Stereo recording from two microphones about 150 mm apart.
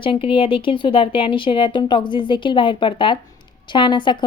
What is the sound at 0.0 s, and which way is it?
A woman's voice, 35° left (ahead or behind).